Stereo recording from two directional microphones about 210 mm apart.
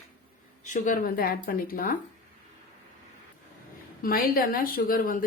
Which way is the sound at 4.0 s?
45° left (ahead or behind).